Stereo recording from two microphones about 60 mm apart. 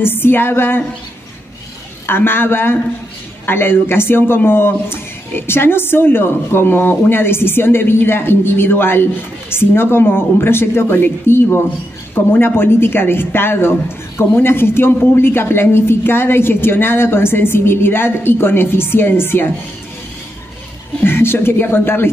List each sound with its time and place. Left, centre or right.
0.0 s speech: left
2.0 s speech: left
21.0 s speech: left